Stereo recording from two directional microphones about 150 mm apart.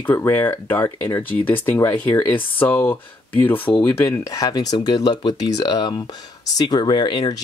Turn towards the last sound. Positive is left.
turn(degrees=30)  # may be behind; listen again after turning